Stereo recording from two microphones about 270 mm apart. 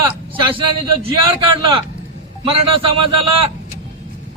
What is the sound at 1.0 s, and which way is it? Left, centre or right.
Speech, centre.